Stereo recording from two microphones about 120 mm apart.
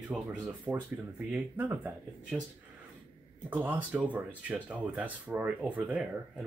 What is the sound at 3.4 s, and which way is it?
Speech, 15° right (ahead or behind).